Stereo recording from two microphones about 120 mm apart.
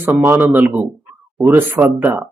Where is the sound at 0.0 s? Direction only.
15° right (ahead or behind).